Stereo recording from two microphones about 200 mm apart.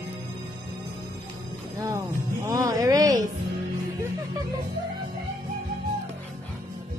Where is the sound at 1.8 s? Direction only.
15° right (ahead or behind).